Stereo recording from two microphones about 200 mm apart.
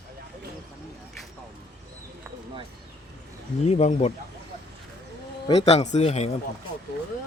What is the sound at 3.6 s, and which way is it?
Speech, 35° left (ahead or behind).